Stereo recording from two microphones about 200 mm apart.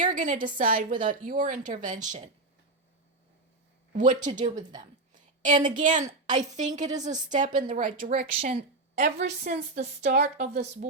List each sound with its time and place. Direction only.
0.0 s a woman's voice: 40° right (ahead or behind)
3.9 s speech: 40° right (ahead or behind)
8.4 s a woman's voice: 35° right (ahead or behind)